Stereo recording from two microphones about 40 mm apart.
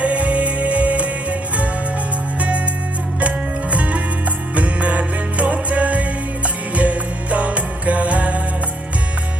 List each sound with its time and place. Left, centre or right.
0.0 s music: right
3.2 s music: right